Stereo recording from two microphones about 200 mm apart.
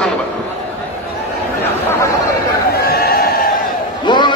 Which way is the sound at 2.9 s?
50° left (ahead or behind).